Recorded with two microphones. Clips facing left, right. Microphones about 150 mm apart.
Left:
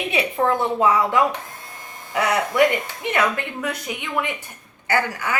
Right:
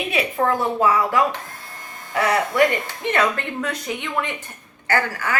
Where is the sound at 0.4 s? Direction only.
20° left (ahead or behind).